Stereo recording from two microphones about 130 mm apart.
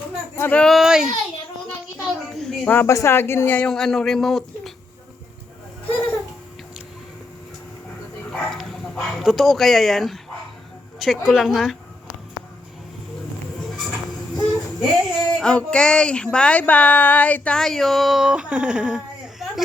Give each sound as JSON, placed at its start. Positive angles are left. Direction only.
{"t": 0.3, "sound": "speech", "side_deg": 15}
{"t": 0.6, "sound": "speech", "side_deg": 0}
{"t": 2.3, "sound": "speech", "side_deg": 5}
{"t": 2.6, "sound": "speech", "side_deg": 20}
{"t": 8.3, "sound": "bow-wow", "side_deg": 5}
{"t": 11.0, "sound": "speech", "side_deg": 0}
{"t": 14.8, "sound": "speech", "side_deg": 0}